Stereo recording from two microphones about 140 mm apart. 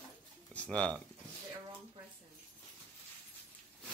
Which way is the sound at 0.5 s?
10° left (ahead or behind).